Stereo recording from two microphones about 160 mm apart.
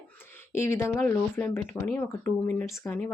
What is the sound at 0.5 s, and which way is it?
Speech, 15° left (ahead or behind).